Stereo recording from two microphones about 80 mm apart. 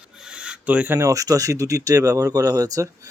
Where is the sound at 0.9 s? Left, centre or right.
Right.